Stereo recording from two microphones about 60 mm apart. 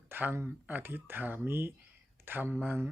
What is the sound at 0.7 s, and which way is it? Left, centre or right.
Speech, right.